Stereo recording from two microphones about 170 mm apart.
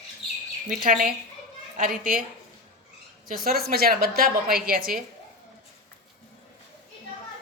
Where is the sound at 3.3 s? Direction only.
60° right (ahead or behind).